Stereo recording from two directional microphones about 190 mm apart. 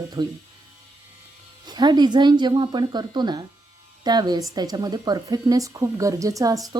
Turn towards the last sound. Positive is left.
turn(degrees=-20)  # may be behind; listen again after turning